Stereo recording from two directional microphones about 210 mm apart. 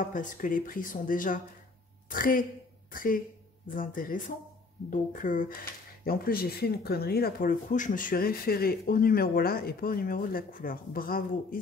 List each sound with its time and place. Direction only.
0.0 s a woman's voice: 40° left (ahead or behind)